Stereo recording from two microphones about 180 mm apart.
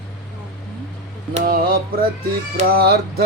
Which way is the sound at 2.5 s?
55° right (ahead or behind).